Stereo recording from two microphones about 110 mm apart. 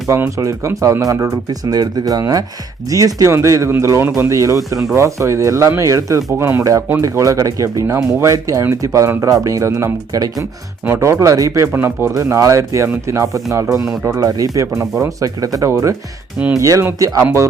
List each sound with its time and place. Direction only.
0.1 s speech: 30° right (ahead or behind)
10.8 s speech: 20° right (ahead or behind)